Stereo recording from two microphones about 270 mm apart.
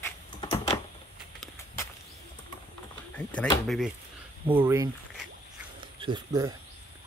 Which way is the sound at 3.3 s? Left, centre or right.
Centre.